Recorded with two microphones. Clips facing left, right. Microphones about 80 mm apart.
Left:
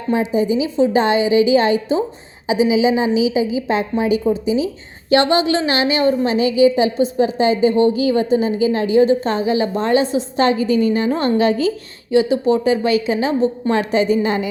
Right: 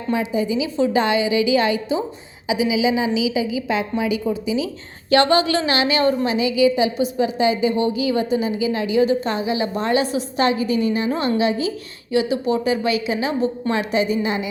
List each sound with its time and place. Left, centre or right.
0.1 s a woman's voice: left
6.3 s a woman's voice: left
12.1 s a woman's voice: left